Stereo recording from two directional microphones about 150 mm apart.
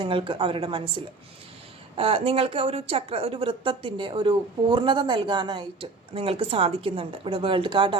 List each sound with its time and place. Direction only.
0.0 s speech: 35° right (ahead or behind)